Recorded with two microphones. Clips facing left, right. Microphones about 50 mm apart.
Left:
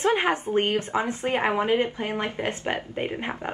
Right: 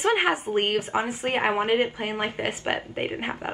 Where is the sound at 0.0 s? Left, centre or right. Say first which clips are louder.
Even; right.